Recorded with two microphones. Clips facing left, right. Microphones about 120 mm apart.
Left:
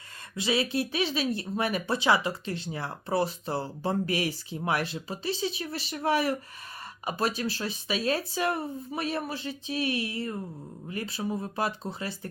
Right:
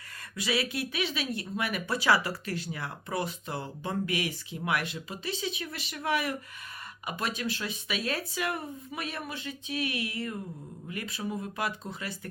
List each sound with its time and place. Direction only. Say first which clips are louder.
0.3 s speech: left 4 dB; 25° left (ahead or behind)